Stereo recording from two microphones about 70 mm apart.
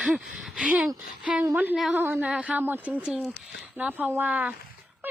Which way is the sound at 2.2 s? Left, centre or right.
Centre.